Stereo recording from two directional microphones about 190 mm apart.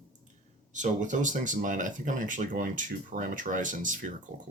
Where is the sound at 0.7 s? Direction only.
40° right (ahead or behind).